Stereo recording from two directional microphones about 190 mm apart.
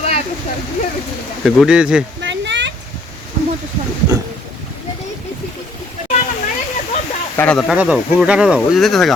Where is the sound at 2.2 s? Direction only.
70° right (ahead or behind).